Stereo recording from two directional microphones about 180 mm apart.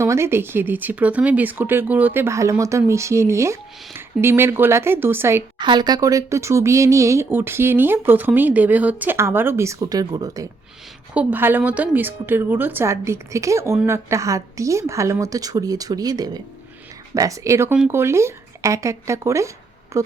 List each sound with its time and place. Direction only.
0.0 s speech: 15° right (ahead or behind)
5.5 s speech: 25° right (ahead or behind)
11.1 s speech: 10° right (ahead or behind)